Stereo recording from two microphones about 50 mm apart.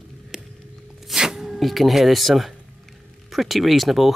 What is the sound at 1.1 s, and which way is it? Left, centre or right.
Speech, centre.